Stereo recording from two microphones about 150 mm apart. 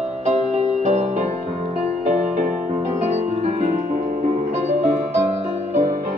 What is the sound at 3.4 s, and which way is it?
Music, 55° right (ahead or behind).